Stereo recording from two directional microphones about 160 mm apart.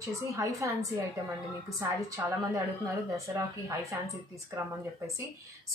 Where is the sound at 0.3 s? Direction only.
20° right (ahead or behind).